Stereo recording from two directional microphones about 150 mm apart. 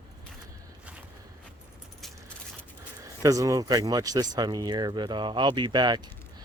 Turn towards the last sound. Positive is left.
turn(degrees=-30)  # may be behind; listen again after turning